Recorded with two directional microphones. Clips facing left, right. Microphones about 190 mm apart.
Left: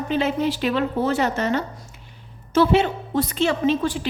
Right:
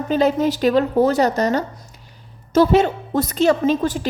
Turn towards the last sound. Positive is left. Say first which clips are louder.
# right 2 dB
turn(degrees=-45)  # may be behind; listen again after turning